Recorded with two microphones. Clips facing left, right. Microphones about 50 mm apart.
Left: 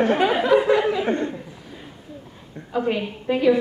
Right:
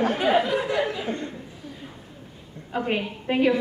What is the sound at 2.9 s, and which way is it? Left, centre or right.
Speech, right.